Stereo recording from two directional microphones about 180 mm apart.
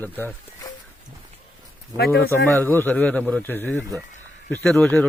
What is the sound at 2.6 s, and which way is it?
A man's voice, 10° left (ahead or behind).